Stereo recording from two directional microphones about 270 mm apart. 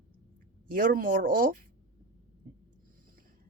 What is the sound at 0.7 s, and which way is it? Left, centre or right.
Speech, right.